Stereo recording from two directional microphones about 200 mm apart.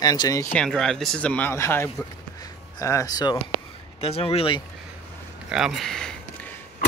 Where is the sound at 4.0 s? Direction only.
30° left (ahead or behind).